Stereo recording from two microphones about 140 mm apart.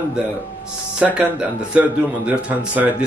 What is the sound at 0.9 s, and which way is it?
Speech, 10° right (ahead or behind).